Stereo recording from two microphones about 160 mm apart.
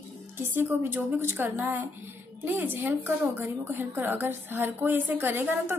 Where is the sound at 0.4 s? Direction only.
10° right (ahead or behind).